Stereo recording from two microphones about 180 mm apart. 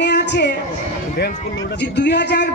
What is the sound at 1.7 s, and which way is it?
Speech, 75° left (ahead or behind).